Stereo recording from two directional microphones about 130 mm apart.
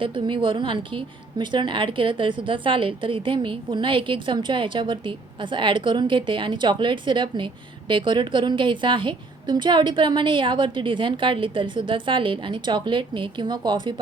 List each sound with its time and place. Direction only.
0.0 s a woman's voice: 40° right (ahead or behind)